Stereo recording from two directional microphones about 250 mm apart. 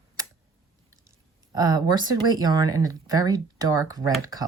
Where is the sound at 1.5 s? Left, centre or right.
Centre.